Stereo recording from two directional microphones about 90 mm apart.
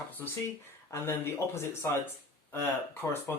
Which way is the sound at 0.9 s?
30° left (ahead or behind).